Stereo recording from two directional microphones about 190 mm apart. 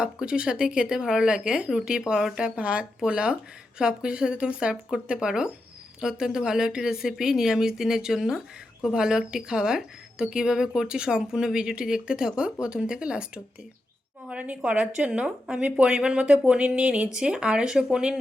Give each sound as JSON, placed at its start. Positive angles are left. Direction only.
{"t": 0.0, "sound": "a woman's voice", "side_deg": -5}